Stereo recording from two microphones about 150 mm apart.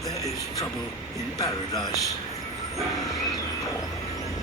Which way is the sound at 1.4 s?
25° left (ahead or behind).